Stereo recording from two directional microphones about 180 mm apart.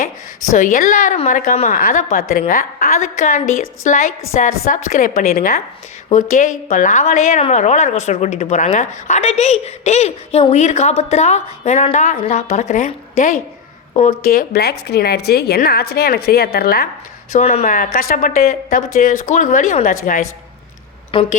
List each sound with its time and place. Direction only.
0.0 s a woman's voice: 45° left (ahead or behind)
17.3 s speech: 40° left (ahead or behind)
21.1 s a woman's voice: 30° left (ahead or behind)